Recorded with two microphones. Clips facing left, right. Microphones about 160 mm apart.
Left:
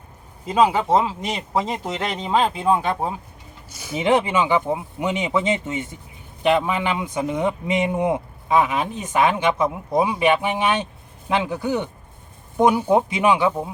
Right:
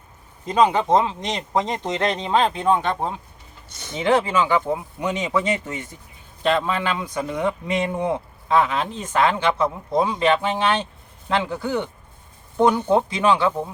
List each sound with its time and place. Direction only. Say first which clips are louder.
0.4 s speech: even; 5° left (ahead or behind)
4.0 s a man's voice: even; 20° left (ahead or behind)